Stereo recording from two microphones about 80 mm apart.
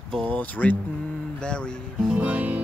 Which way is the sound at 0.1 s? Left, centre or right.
Centre.